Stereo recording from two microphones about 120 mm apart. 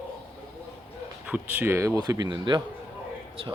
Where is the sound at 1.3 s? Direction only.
15° right (ahead or behind).